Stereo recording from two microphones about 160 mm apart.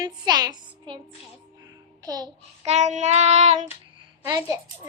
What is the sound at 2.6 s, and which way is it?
Child singing, 45° right (ahead or behind).